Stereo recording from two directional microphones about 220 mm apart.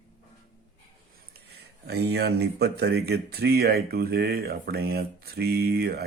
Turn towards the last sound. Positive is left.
turn(degrees=-45)  # may be behind; listen again after turning